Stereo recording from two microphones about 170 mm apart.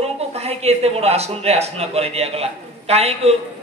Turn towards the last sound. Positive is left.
turn(degrees=-40)  # may be behind; listen again after turning